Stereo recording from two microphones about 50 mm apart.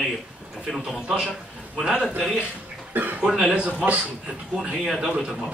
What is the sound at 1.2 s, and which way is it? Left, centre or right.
Speech, centre.